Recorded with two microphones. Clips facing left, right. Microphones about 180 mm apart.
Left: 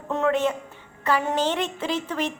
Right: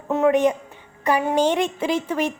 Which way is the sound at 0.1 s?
10° right (ahead or behind).